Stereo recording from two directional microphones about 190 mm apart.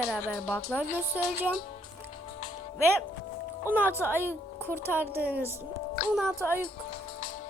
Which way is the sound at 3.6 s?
10° right (ahead or behind).